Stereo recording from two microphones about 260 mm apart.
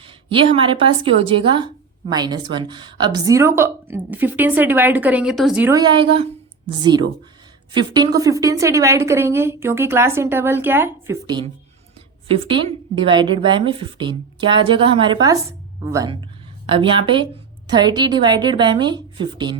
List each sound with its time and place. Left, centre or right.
0.3 s a woman's voice: centre
7.7 s a woman's voice: centre